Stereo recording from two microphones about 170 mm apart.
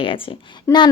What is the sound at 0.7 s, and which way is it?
Speech, 15° left (ahead or behind).